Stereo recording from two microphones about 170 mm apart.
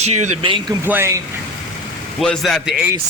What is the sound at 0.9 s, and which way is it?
Speech, 15° right (ahead or behind).